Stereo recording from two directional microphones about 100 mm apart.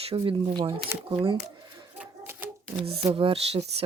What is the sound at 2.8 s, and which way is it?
Speech, 75° right (ahead or behind).